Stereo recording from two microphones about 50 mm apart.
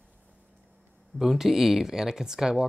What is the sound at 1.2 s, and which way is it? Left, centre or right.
Speech, centre.